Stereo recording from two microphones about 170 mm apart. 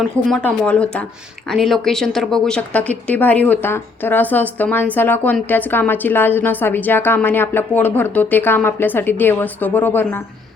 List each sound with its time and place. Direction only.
0.3 s a woman's voice: 5° left (ahead or behind)